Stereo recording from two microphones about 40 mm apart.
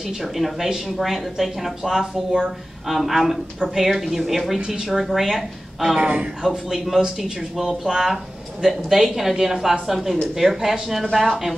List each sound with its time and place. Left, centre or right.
0.2 s speech: centre
5.9 s speech: right
6.4 s a woman's voice: centre
8.6 s a woman's voice: centre